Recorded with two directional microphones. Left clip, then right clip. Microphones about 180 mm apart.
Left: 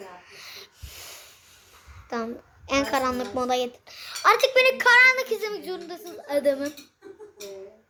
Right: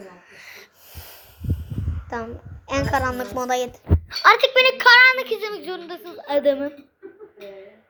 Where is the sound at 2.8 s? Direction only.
5° left (ahead or behind).